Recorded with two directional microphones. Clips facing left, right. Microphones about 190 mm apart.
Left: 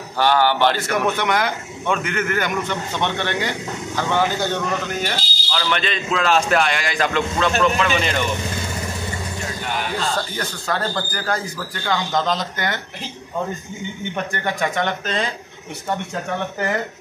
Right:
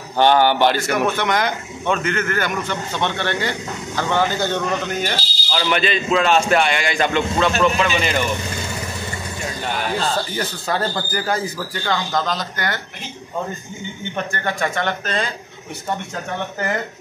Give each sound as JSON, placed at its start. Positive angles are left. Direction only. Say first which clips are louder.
{"t": 0.2, "sound": "a man's voice", "louder": "right 2 dB", "side_deg": -20}
{"t": 1.1, "sound": "speech", "louder": "right 1 dB", "side_deg": 10}
{"t": 5.5, "sound": "speech", "louder": "right 2 dB", "side_deg": -20}
{"t": 5.8, "sound": "speech", "louder": "right 4 dB", "side_deg": -5}
{"t": 10.3, "sound": "a man's voice", "louder": "right 2 dB", "side_deg": -10}
{"t": 11.9, "sound": "speech", "louder": "left 1 dB", "side_deg": 20}
{"t": 14.3, "sound": "speech", "louder": "even", "side_deg": 15}